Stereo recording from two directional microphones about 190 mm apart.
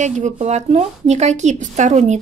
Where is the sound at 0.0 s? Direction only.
40° right (ahead or behind).